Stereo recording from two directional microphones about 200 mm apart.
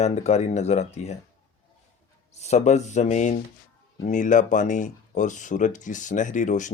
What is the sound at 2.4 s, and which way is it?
Speech, 35° left (ahead or behind).